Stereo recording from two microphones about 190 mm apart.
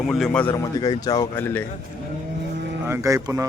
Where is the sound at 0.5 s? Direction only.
20° left (ahead or behind).